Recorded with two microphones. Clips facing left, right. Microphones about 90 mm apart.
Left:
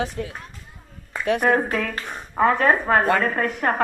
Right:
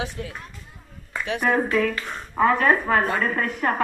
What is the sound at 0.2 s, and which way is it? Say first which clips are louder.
A woman's voice: left 3 dB; 45° left (ahead or behind).